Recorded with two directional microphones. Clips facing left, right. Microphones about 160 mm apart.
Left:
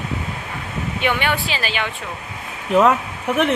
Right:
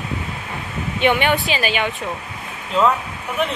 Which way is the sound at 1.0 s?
20° right (ahead or behind).